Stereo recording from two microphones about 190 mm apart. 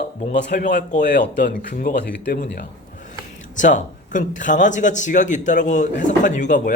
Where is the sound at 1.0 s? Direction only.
65° left (ahead or behind).